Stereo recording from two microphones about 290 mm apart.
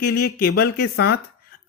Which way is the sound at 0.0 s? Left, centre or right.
Left.